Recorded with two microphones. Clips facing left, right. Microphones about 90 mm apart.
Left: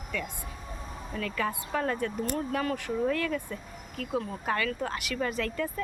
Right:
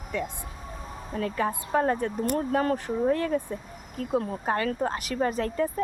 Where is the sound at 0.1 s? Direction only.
30° right (ahead or behind).